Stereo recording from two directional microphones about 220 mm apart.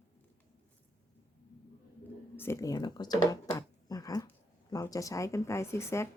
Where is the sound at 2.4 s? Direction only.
15° left (ahead or behind).